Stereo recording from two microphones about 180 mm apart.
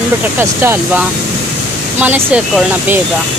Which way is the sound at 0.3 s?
10° right (ahead or behind).